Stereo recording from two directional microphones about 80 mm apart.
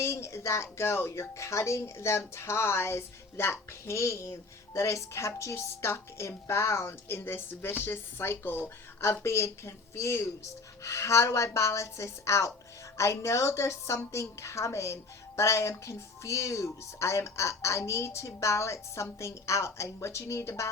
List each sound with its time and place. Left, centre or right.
0.0 s speech: left